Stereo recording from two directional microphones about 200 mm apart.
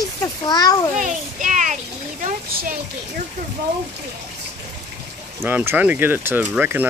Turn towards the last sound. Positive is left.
turn(degrees=-10)  # may be behind; listen again after turning